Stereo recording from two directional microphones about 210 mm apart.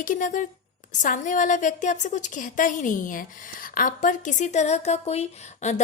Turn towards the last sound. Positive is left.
turn(degrees=30)  # may be behind; listen again after turning